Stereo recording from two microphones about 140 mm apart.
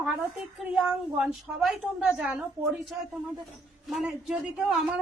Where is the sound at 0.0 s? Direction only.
Centre (ahead or behind).